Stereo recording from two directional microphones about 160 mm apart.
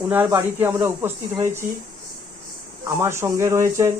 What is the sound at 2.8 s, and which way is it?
Speech, 15° right (ahead or behind).